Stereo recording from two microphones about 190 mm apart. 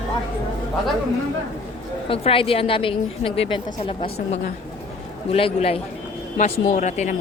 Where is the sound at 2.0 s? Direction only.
30° left (ahead or behind).